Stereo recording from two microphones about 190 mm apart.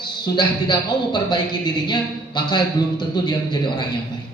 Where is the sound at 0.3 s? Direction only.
25° left (ahead or behind).